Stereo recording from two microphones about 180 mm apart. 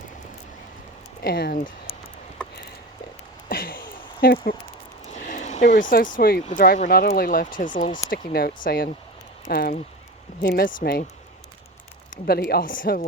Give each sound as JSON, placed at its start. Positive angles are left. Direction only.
{"t": 1.2, "sound": "speech", "side_deg": 60}
{"t": 3.5, "sound": "a sound", "side_deg": 55}
{"t": 5.1, "sound": "speech", "side_deg": 45}
{"t": 12.1, "sound": "speech", "side_deg": 55}